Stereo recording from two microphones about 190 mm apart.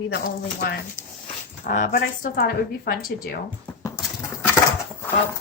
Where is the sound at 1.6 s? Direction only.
45° left (ahead or behind).